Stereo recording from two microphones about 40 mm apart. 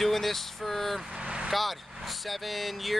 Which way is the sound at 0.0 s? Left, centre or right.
Centre.